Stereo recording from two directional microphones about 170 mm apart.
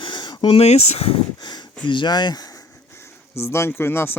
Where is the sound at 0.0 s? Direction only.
25° left (ahead or behind).